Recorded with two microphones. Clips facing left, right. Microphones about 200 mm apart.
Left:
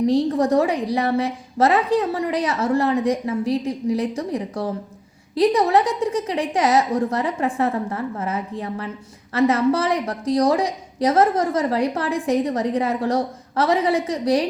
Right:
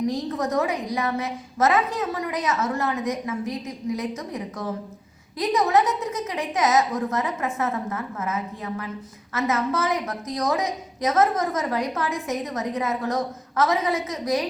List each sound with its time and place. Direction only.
0.0 s a woman's voice: 30° left (ahead or behind)